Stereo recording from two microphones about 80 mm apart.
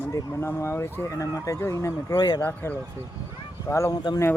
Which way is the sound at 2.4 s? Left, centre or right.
Left.